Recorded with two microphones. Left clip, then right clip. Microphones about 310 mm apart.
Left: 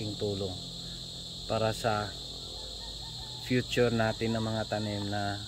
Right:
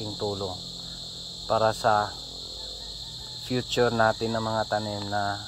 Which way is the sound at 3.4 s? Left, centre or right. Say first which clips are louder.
Right 3 dB; right.